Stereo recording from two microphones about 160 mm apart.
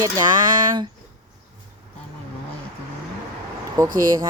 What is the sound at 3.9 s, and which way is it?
Speech, 60° right (ahead or behind).